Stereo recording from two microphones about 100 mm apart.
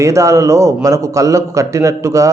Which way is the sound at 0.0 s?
30° right (ahead or behind).